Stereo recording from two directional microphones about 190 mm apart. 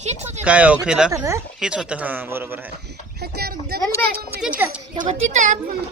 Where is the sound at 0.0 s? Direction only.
35° right (ahead or behind).